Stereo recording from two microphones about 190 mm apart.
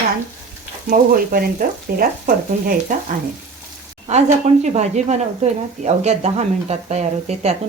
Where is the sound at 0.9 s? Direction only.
50° right (ahead or behind).